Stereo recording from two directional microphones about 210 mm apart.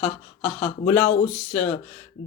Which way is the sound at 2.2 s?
40° left (ahead or behind).